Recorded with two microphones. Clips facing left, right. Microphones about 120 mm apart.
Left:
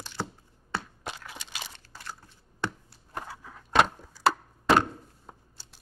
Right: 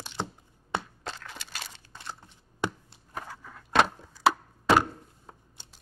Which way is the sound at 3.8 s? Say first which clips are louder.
Right 1 dB; 5° right (ahead or behind).